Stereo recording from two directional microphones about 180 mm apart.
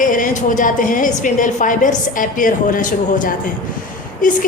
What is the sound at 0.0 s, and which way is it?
A woman's voice, 45° left (ahead or behind).